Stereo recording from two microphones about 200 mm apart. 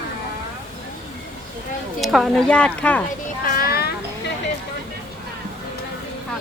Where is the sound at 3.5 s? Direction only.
45° left (ahead or behind).